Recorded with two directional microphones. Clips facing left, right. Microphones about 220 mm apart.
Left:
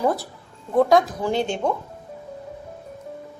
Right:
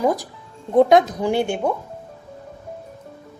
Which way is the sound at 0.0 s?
15° right (ahead or behind).